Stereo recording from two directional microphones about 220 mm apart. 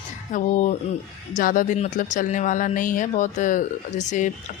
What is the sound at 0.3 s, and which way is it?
Speech, 35° left (ahead or behind).